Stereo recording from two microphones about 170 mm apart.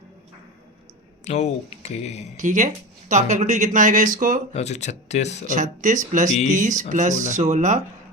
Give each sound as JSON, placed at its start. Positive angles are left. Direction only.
{"t": 1.2, "sound": "speech", "side_deg": 40}
{"t": 2.3, "sound": "speech", "side_deg": -50}
{"t": 4.5, "sound": "speech", "side_deg": 40}
{"t": 5.5, "sound": "speech", "side_deg": -50}